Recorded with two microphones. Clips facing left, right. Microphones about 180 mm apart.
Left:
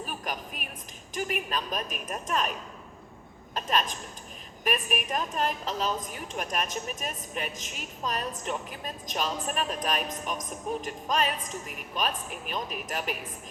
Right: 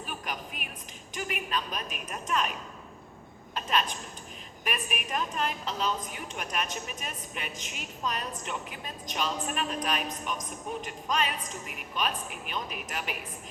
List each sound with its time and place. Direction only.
0.0 s a sound: 40° left (ahead or behind)
1.1 s a woman's voice: 40° left (ahead or behind)
3.5 s a woman's voice: 40° left (ahead or behind)